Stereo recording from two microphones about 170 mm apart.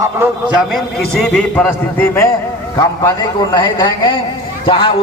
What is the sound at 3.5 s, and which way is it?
A man's voice, 25° left (ahead or behind).